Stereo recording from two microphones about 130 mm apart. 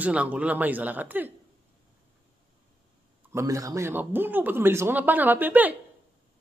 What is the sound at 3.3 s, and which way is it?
Speech, 25° right (ahead or behind).